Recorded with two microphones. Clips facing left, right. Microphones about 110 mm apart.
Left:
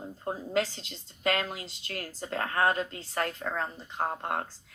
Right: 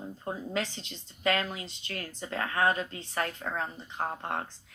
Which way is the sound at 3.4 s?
45° left (ahead or behind).